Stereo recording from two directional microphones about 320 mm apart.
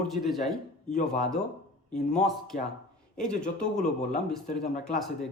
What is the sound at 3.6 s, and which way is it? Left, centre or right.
Speech, left.